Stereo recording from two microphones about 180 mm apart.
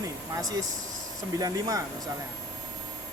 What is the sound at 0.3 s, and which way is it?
Speech, 20° right (ahead or behind).